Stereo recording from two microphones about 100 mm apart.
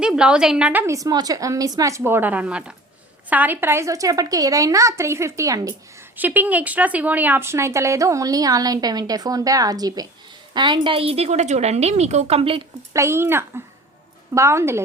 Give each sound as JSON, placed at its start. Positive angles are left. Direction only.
{"t": 0.0, "sound": "a woman's voice", "side_deg": -10}
{"t": 0.9, "sound": "speech", "side_deg": -35}
{"t": 6.1, "sound": "a woman's voice", "side_deg": -15}
{"t": 12.9, "sound": "speech", "side_deg": -30}